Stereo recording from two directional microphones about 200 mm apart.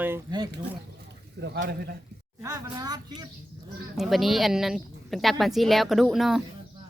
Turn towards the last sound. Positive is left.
turn(degrees=0)  # may be behind; listen again after turning